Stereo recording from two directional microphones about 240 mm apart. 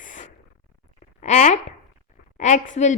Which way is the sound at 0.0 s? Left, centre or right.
Left.